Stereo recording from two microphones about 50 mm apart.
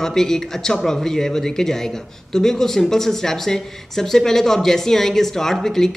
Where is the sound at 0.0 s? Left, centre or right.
Centre.